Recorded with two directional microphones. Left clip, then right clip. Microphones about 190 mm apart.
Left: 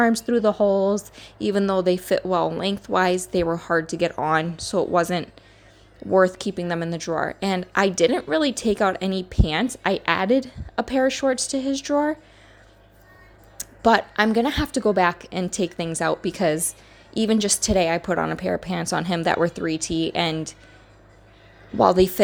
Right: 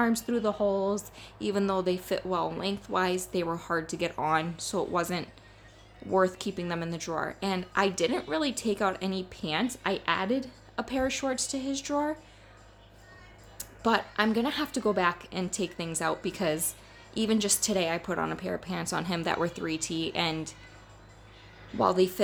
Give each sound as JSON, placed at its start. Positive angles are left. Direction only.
{"t": 0.0, "sound": "speech", "side_deg": 35}
{"t": 13.6, "sound": "speech", "side_deg": 40}
{"t": 21.8, "sound": "speech", "side_deg": 40}